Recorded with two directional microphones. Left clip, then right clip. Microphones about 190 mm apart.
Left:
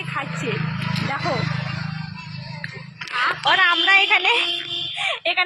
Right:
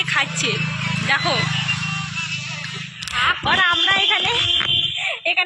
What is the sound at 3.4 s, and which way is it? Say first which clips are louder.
Speech: left 2 dB; 30° left (ahead or behind).